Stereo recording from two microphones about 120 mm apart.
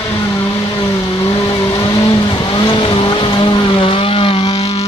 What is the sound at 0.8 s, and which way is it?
Vehicle, 30° left (ahead or behind).